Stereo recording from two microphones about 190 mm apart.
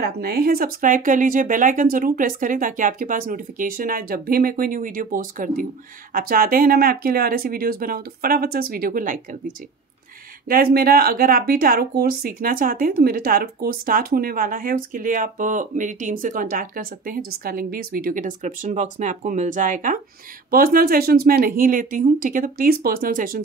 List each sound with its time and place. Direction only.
0.0 s speech: 55° right (ahead or behind)
10.5 s speech: 50° right (ahead or behind)